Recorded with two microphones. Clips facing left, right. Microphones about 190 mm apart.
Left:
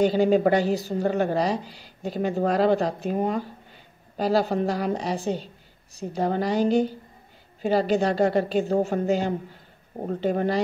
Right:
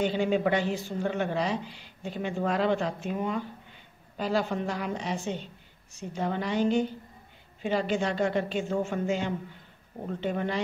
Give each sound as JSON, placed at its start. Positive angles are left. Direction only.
{"t": 0.0, "sound": "a woman's voice", "side_deg": 40}